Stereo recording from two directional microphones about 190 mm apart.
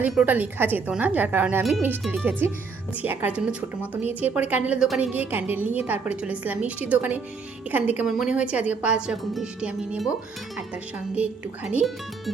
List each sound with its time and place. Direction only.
0.0 s speech: 5° right (ahead or behind)
11.7 s speech: 5° right (ahead or behind)